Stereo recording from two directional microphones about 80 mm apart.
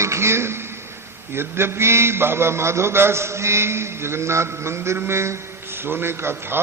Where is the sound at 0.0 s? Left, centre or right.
Right.